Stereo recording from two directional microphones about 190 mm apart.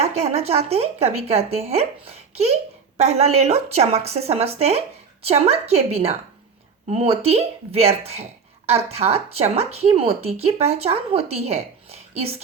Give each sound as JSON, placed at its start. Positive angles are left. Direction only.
{"t": 0.0, "sound": "speech", "side_deg": -35}